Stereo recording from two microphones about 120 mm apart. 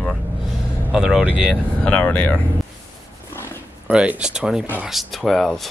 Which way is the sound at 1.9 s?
10° left (ahead or behind).